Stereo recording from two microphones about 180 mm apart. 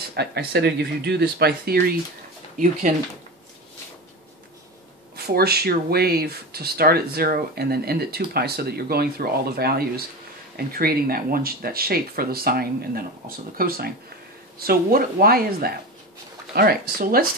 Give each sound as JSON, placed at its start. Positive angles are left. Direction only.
{"t": 0.1, "sound": "speech", "side_deg": -65}
{"t": 5.1, "sound": "speech", "side_deg": -60}